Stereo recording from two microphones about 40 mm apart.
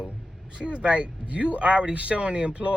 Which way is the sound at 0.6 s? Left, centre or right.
Right.